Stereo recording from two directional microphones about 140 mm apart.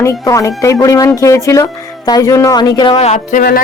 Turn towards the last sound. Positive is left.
turn(degrees=85)